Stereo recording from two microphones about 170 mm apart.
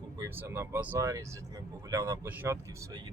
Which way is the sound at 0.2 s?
15° right (ahead or behind).